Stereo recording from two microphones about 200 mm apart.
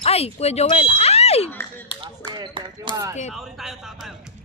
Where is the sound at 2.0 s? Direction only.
25° right (ahead or behind).